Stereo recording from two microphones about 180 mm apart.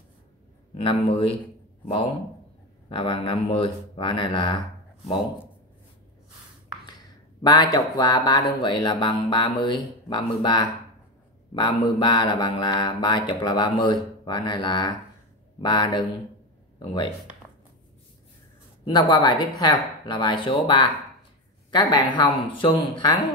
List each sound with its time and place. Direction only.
0.7 s a man's voice: 30° left (ahead or behind)
2.9 s speech: 25° left (ahead or behind)
7.4 s speech: 25° left (ahead or behind)
18.9 s speech: 25° left (ahead or behind)